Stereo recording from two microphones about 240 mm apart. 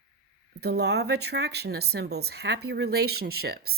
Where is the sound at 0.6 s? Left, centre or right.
Right.